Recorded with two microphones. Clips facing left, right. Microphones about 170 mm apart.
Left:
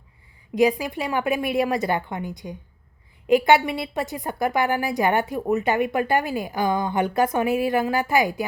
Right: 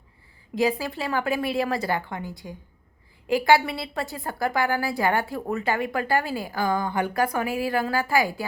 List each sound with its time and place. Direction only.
0.5 s a woman's voice: 15° left (ahead or behind)